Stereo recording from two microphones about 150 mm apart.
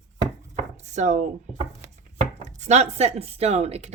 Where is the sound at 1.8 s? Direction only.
50° right (ahead or behind).